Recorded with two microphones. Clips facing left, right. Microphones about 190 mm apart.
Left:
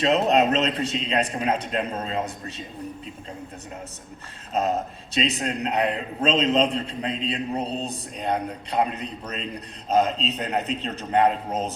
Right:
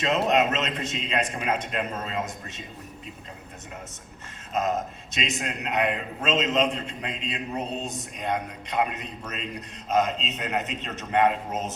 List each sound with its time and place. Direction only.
0.0 s a man's voice: 35° left (ahead or behind)
4.5 s a man's voice: 35° left (ahead or behind)